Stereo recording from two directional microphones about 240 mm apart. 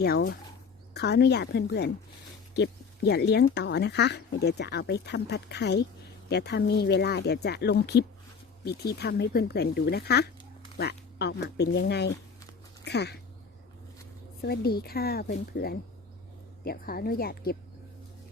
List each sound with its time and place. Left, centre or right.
0.0 s a woman's voice: left
14.4 s a woman's voice: left